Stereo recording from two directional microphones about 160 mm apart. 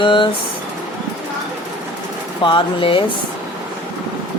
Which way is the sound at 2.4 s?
30° left (ahead or behind).